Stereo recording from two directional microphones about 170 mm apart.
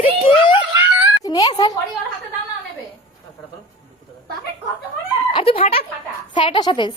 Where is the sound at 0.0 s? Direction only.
30° left (ahead or behind).